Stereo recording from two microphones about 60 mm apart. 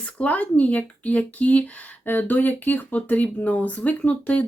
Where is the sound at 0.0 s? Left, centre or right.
Left.